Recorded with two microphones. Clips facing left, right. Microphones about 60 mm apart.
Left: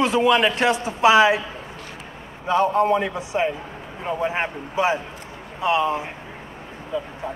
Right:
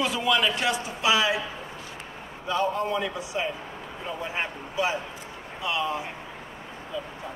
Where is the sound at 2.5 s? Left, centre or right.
Left.